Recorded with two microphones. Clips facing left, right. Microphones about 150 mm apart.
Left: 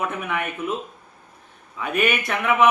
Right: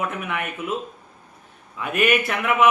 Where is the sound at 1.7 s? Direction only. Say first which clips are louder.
Right 2 dB; 5° right (ahead or behind).